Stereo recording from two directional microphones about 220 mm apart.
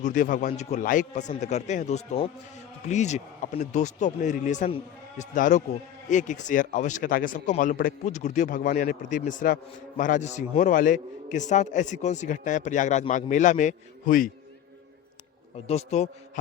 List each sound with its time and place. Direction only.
0.0 s a man's voice: 35° left (ahead or behind)
15.6 s a man's voice: 30° left (ahead or behind)